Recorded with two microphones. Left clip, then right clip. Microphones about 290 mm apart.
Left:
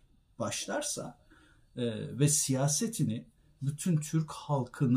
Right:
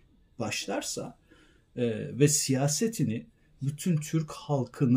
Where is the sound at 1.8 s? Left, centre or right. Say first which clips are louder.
Right 6 dB; centre.